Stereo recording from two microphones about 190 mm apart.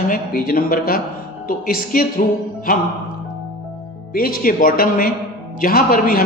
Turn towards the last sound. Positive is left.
turn(degrees=50)  # may be behind; listen again after turning